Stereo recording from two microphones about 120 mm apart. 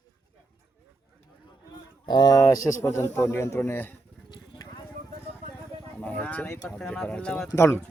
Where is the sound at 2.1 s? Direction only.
35° left (ahead or behind); by 3.9 s 20° left (ahead or behind).